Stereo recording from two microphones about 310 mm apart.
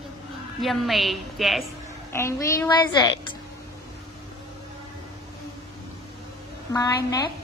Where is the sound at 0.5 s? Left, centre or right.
Centre.